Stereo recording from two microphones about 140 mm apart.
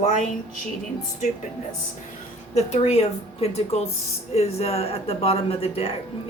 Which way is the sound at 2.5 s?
50° left (ahead or behind).